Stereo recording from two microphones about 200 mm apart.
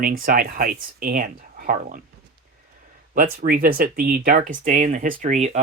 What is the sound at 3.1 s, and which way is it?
Speech, 45° right (ahead or behind).